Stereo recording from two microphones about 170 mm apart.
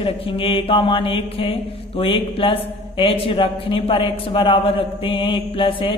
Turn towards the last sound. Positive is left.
turn(degrees=30)  # may be behind; listen again after turning